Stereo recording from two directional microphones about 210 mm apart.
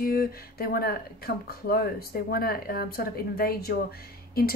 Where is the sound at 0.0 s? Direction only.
45° left (ahead or behind).